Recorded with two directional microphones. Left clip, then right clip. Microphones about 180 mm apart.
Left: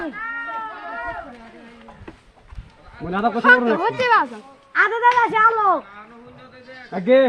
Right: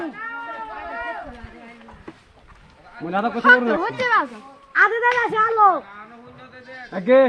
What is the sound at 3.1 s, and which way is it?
A man's voice, 55° left (ahead or behind).